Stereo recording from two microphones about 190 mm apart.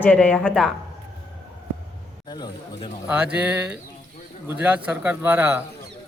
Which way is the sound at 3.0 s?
5° right (ahead or behind).